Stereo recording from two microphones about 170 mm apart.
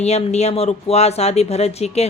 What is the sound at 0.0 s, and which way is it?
Speech, 40° left (ahead or behind).